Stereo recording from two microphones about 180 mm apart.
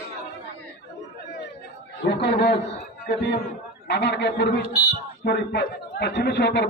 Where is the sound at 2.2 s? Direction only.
75° left (ahead or behind).